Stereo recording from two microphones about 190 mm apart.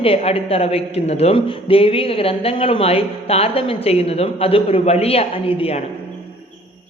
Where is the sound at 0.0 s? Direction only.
30° left (ahead or behind).